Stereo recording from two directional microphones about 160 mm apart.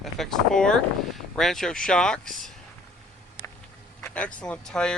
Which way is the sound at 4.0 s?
5° left (ahead or behind).